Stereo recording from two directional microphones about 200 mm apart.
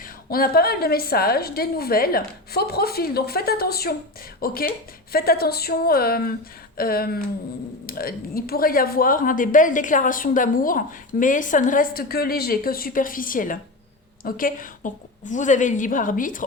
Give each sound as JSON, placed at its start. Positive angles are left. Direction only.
{"t": 0.0, "sound": "a woman's voice", "side_deg": 45}